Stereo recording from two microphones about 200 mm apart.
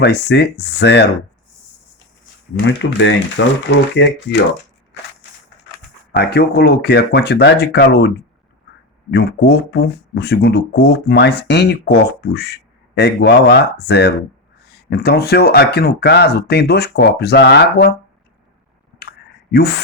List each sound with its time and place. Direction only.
0.0 s speech: 55° left (ahead or behind)
2.6 s speech: 65° left (ahead or behind)
6.1 s speech: 55° left (ahead or behind)
19.0 s clicking: 55° left (ahead or behind)